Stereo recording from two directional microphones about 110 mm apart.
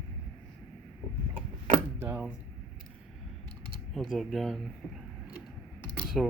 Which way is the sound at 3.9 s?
Centre (ahead or behind).